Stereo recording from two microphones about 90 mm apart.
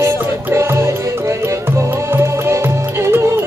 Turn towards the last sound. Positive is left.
turn(degrees=-30)  # may be behind; listen again after turning